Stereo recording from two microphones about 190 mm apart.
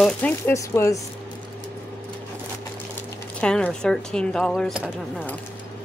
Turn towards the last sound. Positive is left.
turn(degrees=0)  # may be behind; listen again after turning